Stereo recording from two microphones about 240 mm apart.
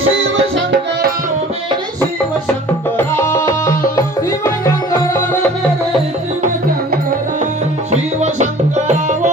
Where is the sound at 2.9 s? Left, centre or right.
Centre.